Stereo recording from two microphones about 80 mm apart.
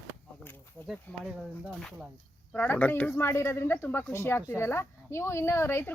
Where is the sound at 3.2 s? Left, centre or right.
Left.